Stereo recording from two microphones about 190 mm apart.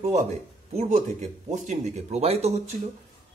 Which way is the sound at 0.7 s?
35° right (ahead or behind).